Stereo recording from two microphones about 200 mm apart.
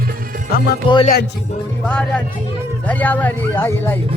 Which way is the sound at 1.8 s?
5° left (ahead or behind).